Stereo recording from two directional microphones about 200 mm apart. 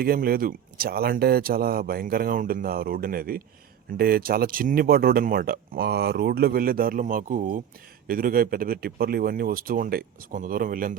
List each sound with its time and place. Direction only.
0.0 s speech: 50° right (ahead or behind)